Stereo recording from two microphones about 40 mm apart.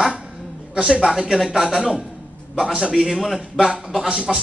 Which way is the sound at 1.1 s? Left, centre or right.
Centre.